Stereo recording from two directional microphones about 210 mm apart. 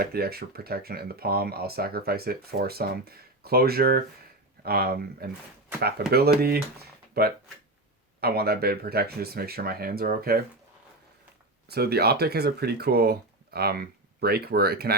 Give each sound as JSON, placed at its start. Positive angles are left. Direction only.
{"t": 0.0, "sound": "speech", "side_deg": -50}
{"t": 11.7, "sound": "speech", "side_deg": -50}